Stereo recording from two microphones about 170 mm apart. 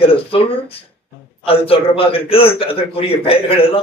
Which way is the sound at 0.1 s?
30° left (ahead or behind).